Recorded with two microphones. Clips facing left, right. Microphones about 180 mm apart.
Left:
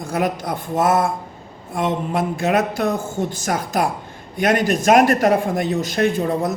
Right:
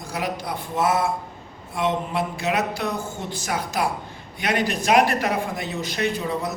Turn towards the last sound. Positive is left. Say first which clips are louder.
# left 6 dB
turn(degrees=50)  # may be behind; listen again after turning